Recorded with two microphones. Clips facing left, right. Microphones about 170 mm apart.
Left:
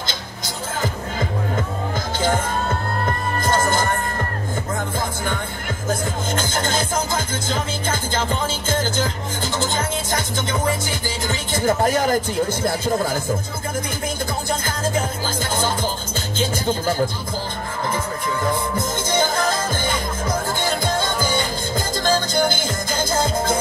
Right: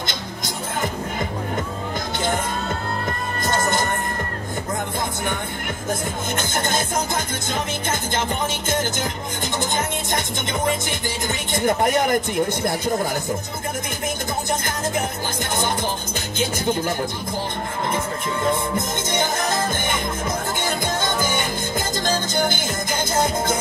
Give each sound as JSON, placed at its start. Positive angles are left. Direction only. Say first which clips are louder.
{"t": 7.9, "sound": "music", "louder": "left 2 dB", "side_deg": -20}
{"t": 10.9, "sound": "speech", "louder": "left 1 dB", "side_deg": -20}
{"t": 17.9, "sound": "music", "louder": "even", "side_deg": -25}
{"t": 22.5, "sound": "music", "louder": "left 1 dB", "side_deg": -20}